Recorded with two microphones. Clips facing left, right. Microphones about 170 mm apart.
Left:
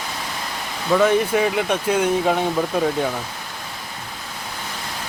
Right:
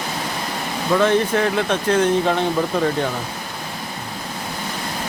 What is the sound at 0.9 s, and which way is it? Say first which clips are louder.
Speech: even; 10° left (ahead or behind).